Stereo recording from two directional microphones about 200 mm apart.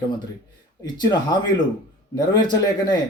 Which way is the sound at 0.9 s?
20° left (ahead or behind).